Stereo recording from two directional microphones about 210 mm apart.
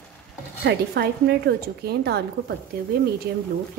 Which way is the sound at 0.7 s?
50° right (ahead or behind).